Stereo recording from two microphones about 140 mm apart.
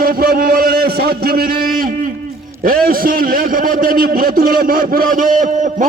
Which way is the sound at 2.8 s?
90° right.